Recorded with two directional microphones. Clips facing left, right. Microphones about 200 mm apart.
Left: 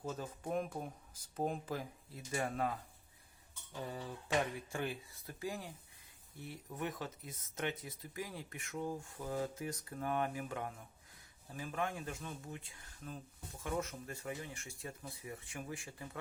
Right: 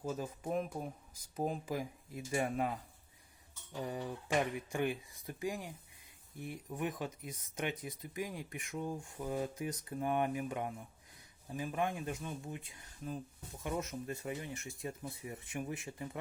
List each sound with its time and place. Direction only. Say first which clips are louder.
0.0 s speech: right 3 dB; 10° right (ahead or behind)
1.7 s speech: right 3 dB; 15° right (ahead or behind)
3.8 s speech: right 4 dB; 15° right (ahead or behind)